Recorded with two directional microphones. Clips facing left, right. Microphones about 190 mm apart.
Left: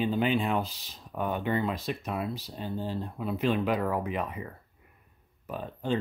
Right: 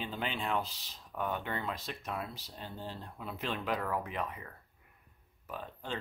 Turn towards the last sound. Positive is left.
turn(degrees=15)  # may be behind; listen again after turning